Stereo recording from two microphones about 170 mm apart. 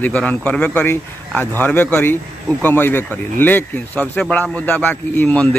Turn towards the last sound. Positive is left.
turn(degrees=10)  # may be behind; listen again after turning